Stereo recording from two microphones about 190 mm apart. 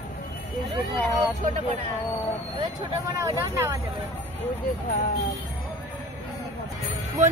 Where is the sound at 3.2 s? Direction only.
15° right (ahead or behind).